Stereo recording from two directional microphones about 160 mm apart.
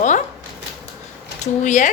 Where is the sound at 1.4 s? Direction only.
50° left (ahead or behind).